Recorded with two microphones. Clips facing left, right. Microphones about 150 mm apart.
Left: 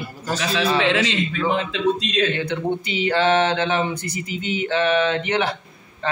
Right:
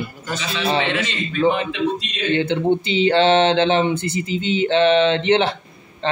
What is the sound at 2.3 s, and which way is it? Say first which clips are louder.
Mantra: right 6 dB; 25° right (ahead or behind).